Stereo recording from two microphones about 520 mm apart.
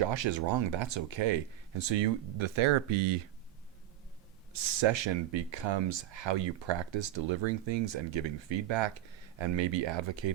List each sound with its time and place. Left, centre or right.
0.1 s speech: right
4.5 s speech: right